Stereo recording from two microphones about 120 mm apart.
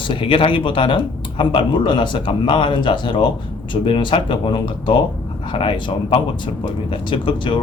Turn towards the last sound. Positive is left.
turn(degrees=40)  # may be behind; listen again after turning